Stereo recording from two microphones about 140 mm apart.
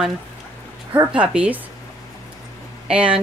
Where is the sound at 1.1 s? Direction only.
10° right (ahead or behind).